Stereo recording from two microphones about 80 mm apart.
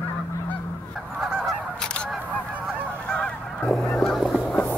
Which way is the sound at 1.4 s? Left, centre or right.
Centre.